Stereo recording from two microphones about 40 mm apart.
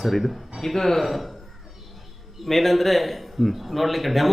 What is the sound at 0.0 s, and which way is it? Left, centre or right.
A man's voice, centre.